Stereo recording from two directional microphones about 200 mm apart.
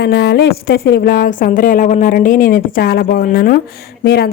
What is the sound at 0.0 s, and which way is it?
A woman's voice, 55° left (ahead or behind).